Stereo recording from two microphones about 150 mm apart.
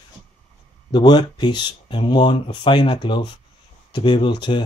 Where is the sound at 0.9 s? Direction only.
30° left (ahead or behind).